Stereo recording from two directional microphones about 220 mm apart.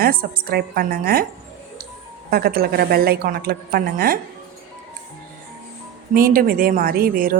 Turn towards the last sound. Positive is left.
turn(degrees=-40)  # may be behind; listen again after turning